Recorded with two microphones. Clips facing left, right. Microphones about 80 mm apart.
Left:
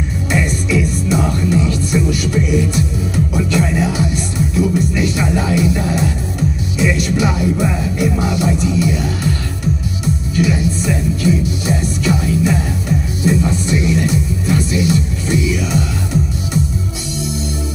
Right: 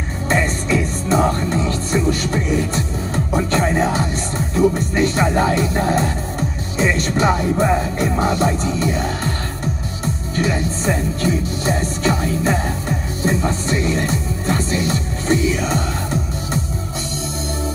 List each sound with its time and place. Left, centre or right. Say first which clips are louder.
0.3 s music: even; right